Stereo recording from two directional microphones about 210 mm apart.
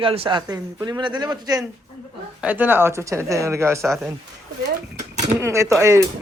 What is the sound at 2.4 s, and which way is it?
A man's voice, 10° right (ahead or behind).